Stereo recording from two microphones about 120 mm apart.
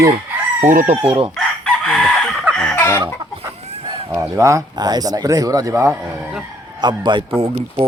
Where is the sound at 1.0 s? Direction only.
55° right (ahead or behind).